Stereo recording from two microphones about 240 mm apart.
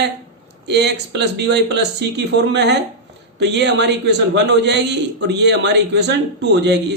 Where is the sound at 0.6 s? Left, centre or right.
Right.